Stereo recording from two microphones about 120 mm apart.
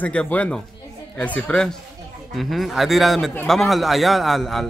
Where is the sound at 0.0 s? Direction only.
10° left (ahead or behind).